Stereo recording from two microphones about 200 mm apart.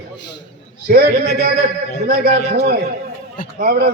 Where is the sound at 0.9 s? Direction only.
50° right (ahead or behind).